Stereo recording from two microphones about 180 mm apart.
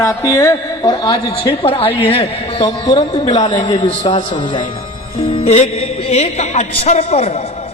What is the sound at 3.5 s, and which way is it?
Speech, 35° left (ahead or behind).